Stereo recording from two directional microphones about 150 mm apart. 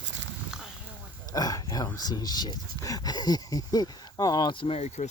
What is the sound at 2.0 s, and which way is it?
Speech, 25° left (ahead or behind).